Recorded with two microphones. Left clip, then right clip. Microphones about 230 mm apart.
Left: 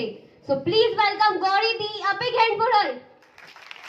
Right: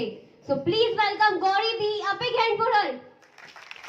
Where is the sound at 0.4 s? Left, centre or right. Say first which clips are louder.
Left 3 dB; left.